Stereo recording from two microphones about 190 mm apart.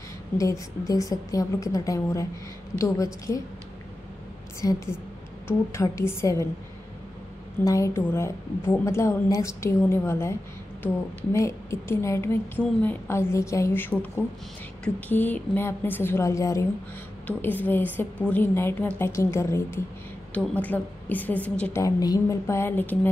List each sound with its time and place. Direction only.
0.4 s a woman's voice: 15° left (ahead or behind)
4.6 s a woman's voice: 15° left (ahead or behind)
7.6 s a woman's voice: 15° left (ahead or behind)
11.3 s a woman's voice: 15° left (ahead or behind)
21.8 s a woman's voice: 20° left (ahead or behind)